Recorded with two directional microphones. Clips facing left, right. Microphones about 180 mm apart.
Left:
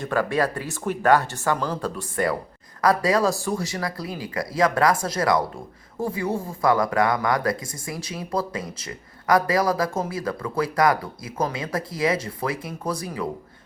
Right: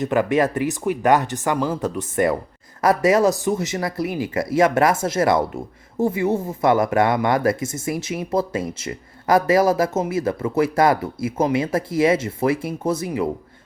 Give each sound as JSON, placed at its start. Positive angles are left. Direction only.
{"t": 0.0, "sound": "speech", "side_deg": -20}